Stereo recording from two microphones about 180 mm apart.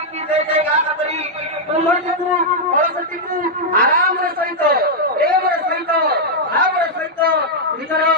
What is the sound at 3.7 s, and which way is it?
A man's voice, 55° right (ahead or behind).